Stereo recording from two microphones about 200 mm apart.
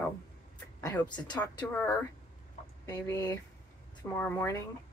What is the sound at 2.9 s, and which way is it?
Speech, 15° left (ahead or behind).